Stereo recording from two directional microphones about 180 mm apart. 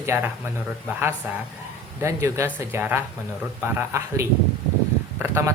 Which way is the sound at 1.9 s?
15° right (ahead or behind).